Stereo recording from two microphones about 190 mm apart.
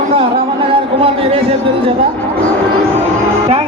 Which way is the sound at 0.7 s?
30° right (ahead or behind).